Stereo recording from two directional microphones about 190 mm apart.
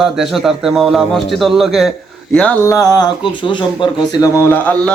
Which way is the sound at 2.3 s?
5° left (ahead or behind).